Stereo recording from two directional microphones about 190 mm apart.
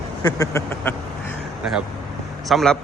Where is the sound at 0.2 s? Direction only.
15° left (ahead or behind).